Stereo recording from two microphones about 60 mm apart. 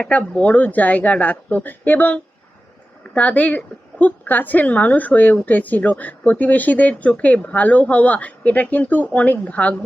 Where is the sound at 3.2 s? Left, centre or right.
Left.